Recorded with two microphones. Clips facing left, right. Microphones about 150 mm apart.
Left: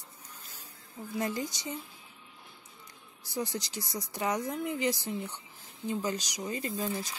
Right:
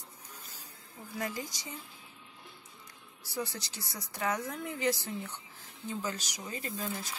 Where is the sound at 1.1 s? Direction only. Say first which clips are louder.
Left 4 dB; 25° left (ahead or behind).